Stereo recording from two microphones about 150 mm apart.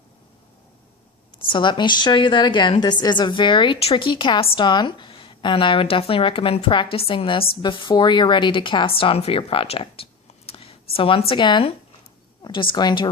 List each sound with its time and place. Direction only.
1.5 s a woman's voice: 35° left (ahead or behind)